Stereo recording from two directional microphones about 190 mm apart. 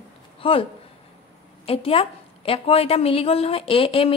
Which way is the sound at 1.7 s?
30° left (ahead or behind).